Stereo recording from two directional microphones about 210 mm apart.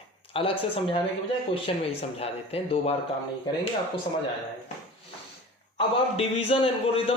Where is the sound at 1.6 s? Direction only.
30° left (ahead or behind).